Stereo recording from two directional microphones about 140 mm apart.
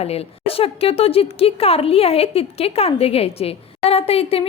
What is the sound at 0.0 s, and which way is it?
A woman's voice, 45° left (ahead or behind).